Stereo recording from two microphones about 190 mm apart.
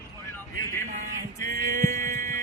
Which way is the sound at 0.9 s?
45° right (ahead or behind).